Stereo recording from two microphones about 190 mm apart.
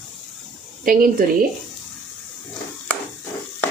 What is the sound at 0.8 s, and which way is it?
Speech, 45° right (ahead or behind).